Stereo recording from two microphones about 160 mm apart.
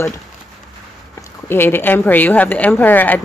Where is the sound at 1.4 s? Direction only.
15° left (ahead or behind).